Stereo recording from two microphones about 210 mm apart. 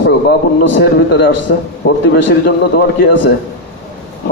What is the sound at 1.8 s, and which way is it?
A man's voice, 50° left (ahead or behind).